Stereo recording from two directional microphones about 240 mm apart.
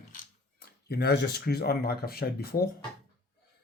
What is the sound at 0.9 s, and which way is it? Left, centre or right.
Speech, left.